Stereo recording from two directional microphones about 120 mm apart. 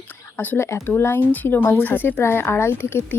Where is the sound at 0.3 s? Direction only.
20° left (ahead or behind).